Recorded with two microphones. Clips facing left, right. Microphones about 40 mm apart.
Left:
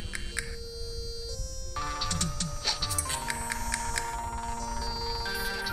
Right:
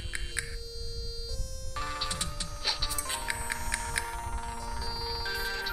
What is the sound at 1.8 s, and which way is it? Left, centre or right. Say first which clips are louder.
Music: left 2 dB; centre.